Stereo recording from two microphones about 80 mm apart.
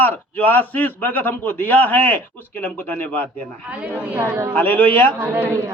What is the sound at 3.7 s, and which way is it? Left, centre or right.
Speech, centre.